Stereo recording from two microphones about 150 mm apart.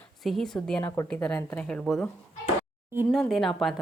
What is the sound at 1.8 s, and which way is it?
Speech, centre (ahead or behind).